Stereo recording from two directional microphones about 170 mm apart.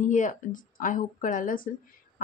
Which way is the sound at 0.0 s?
50° left (ahead or behind).